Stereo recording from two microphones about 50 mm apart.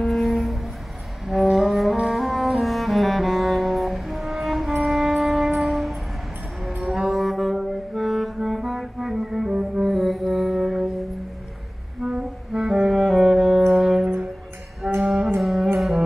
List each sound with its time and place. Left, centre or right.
0.0 s music: centre
7.0 s music: centre
12.0 s music: centre
12.9 s music: centre
13.4 s brass instrument: centre
15.0 s saxophone: centre
15.4 s music: centre